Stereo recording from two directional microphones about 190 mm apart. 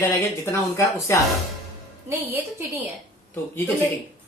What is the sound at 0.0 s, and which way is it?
Speech, 15° left (ahead or behind).